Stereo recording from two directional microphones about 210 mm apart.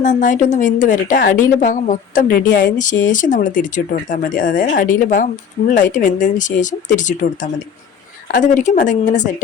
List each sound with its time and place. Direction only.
0.0 s a woman's voice: 40° left (ahead or behind)